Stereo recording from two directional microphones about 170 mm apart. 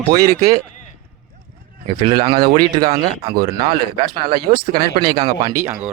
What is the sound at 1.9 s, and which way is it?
Speech, 30° right (ahead or behind).